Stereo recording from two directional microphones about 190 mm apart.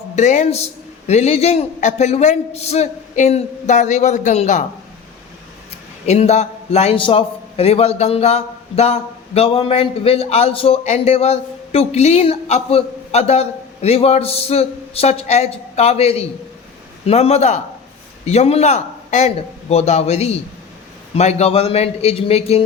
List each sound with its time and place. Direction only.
0.2 s a man's voice: 40° left (ahead or behind)
6.1 s a man's voice: 35° left (ahead or behind)